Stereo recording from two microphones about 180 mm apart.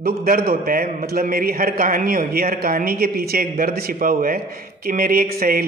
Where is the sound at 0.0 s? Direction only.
55° right (ahead or behind).